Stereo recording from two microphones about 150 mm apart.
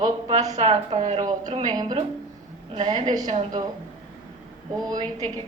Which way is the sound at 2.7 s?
30° right (ahead or behind).